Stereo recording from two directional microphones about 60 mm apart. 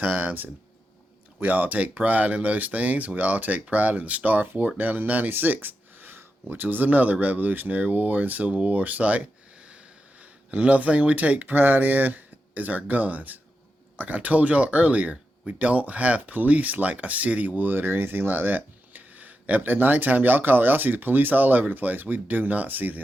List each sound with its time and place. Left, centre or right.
0.0 s speech: right